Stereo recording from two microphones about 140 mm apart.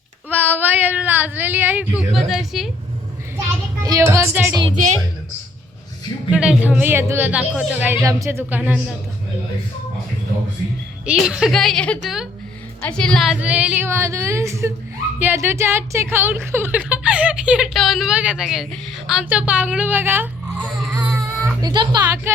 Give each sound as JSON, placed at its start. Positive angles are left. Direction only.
{"t": 0.3, "sound": "speech", "side_deg": -15}
{"t": 2.0, "sound": "a woman's voice", "side_deg": 0}
{"t": 3.8, "sound": "speech", "side_deg": -20}
{"t": 6.3, "sound": "speech", "side_deg": -10}
{"t": 11.0, "sound": "a woman's voice", "side_deg": -5}
{"t": 13.3, "sound": "speech", "side_deg": -10}
{"t": 21.0, "sound": "baby cry", "side_deg": -20}
{"t": 21.6, "sound": "speech", "side_deg": -30}